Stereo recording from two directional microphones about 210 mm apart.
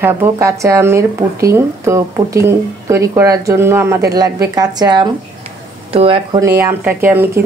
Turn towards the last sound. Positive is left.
turn(degrees=-10)  # may be behind; listen again after turning